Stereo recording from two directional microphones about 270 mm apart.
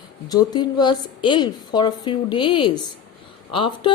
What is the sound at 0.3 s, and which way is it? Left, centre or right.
A woman's voice, centre.